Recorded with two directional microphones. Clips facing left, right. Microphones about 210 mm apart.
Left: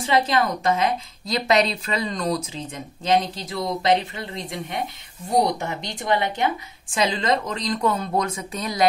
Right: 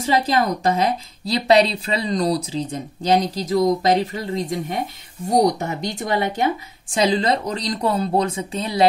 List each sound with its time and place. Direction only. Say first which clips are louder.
0.0 s a woman's voice: right 2 dB; 40° right (ahead or behind)